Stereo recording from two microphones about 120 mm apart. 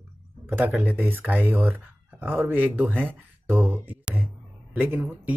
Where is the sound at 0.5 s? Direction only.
15° right (ahead or behind).